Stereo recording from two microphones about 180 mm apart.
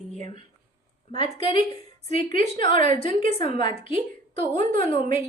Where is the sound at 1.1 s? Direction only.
25° left (ahead or behind).